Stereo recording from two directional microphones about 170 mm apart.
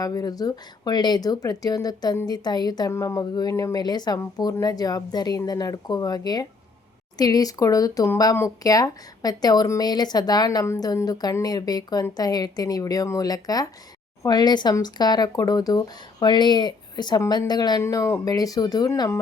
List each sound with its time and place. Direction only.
0.0 s speech: 20° left (ahead or behind)